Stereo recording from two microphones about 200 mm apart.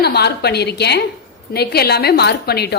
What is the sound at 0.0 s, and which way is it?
A woman's voice, 55° left (ahead or behind).